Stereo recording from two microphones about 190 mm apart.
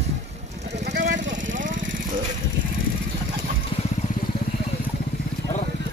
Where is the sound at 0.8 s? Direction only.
65° right (ahead or behind).